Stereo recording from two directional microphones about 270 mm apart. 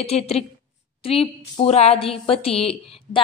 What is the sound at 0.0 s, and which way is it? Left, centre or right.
A woman's voice, left.